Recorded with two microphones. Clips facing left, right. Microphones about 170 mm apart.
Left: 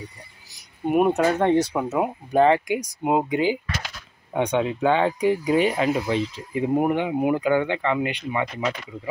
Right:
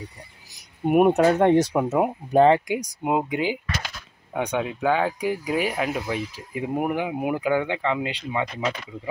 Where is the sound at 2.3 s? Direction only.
30° right (ahead or behind).